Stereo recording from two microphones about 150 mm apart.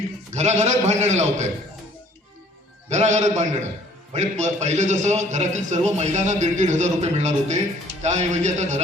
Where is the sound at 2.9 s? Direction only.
50° right (ahead or behind).